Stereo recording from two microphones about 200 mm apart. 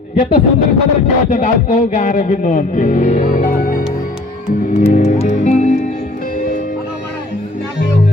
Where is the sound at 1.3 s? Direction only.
40° left (ahead or behind).